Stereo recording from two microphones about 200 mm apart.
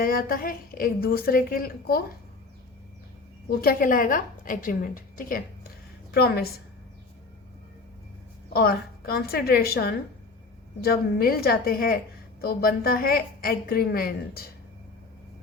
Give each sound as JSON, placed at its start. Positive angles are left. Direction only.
{"t": 0.0, "sound": "a woman's voice", "side_deg": 45}
{"t": 3.6, "sound": "a woman's voice", "side_deg": 45}
{"t": 8.5, "sound": "a woman's voice", "side_deg": 50}